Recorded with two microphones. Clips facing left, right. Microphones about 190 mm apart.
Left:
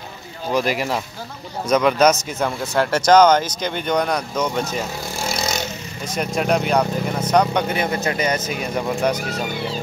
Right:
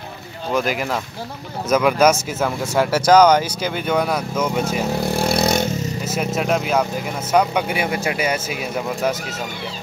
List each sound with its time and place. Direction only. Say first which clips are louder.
0.5 s speech: even; centre (ahead or behind)
4.6 s vehicle: right 6 dB; 60° right (ahead or behind)
6.0 s speech: left 1 dB; 5° right (ahead or behind)